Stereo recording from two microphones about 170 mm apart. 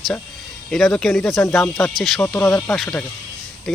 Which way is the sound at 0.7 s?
Centre (ahead or behind).